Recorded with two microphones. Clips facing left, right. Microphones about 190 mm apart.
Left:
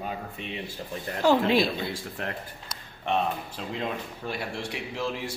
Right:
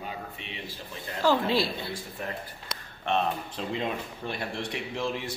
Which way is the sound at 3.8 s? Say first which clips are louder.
Left 2 dB; 5° left (ahead or behind).